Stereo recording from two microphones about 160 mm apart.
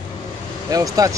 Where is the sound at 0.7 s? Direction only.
20° right (ahead or behind).